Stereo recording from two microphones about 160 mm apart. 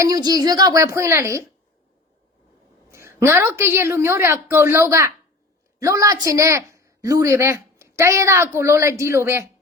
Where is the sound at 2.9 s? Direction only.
15° right (ahead or behind).